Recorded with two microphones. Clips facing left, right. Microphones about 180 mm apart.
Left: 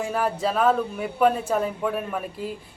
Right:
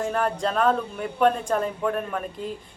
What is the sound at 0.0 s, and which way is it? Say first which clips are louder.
A man's voice: even; 5° left (ahead or behind).